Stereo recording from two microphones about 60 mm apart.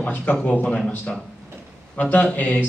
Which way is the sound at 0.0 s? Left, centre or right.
Left.